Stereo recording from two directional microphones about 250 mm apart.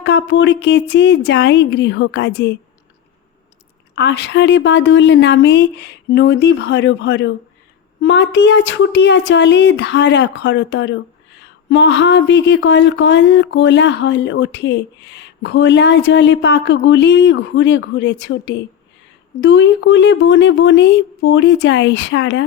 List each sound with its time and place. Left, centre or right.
0.0 s speech: left
3.9 s speech: left